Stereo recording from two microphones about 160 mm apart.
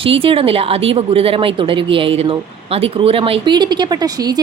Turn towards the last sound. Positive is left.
turn(degrees=-25)  # may be behind; listen again after turning